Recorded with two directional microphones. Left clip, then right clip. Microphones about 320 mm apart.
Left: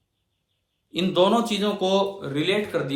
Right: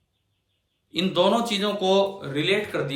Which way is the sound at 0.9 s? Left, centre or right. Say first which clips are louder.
Left 1 dB; centre.